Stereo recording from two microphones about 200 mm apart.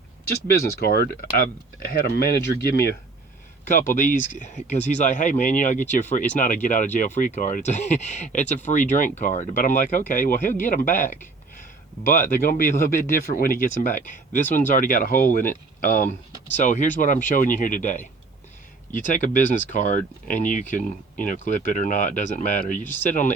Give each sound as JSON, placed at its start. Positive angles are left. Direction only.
{"t": 0.3, "sound": "speech", "side_deg": 50}
{"t": 3.7, "sound": "speech", "side_deg": 40}